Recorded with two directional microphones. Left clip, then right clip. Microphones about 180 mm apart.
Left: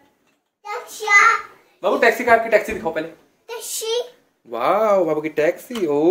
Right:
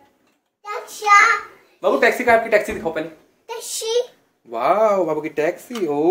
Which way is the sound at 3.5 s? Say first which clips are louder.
Right 1 dB; 5° right (ahead or behind).